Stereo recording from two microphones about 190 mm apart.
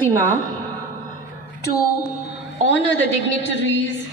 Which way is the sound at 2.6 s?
75° left (ahead or behind).